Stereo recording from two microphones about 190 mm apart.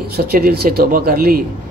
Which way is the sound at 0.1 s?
55° right (ahead or behind).